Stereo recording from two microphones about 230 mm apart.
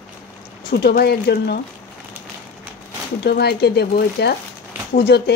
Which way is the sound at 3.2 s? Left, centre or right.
Left.